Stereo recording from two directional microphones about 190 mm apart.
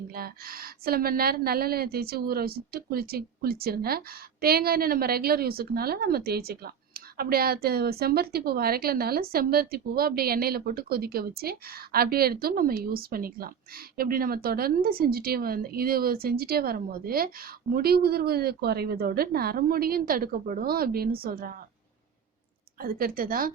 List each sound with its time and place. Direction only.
0.1 s a woman's voice: 50° right (ahead or behind)
22.8 s a woman's voice: 50° right (ahead or behind)